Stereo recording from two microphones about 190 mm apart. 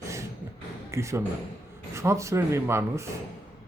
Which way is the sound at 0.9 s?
15° right (ahead or behind).